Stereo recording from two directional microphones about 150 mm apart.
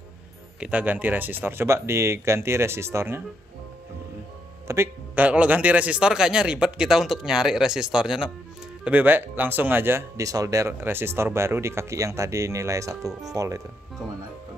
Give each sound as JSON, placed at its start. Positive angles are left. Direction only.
{"t": 0.6, "sound": "speech", "side_deg": -10}
{"t": 4.6, "sound": "a man's voice", "side_deg": -15}